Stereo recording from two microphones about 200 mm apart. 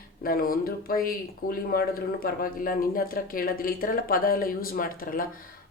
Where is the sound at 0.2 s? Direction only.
45° left (ahead or behind).